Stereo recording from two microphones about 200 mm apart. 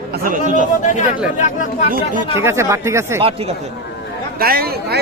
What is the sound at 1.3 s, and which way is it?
Speech, 40° left (ahead or behind).